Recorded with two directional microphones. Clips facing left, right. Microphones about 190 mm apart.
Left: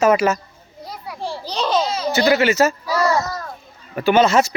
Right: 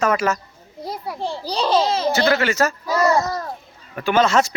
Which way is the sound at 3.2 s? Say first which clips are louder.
Right 2 dB; 35° right (ahead or behind).